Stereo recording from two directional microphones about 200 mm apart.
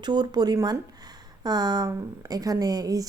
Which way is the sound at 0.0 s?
20° right (ahead or behind).